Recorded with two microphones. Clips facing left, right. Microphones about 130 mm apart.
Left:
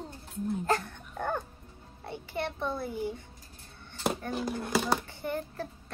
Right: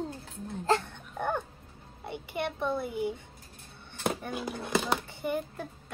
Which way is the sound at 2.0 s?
15° right (ahead or behind).